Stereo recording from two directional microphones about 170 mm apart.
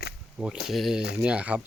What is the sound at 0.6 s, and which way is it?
Speech, centre (ahead or behind).